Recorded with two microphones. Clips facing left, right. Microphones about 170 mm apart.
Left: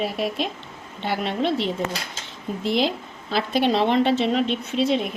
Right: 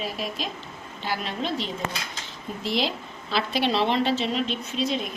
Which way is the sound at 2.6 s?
50° left (ahead or behind).